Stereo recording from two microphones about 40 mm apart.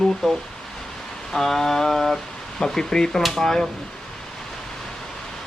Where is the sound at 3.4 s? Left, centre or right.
Centre.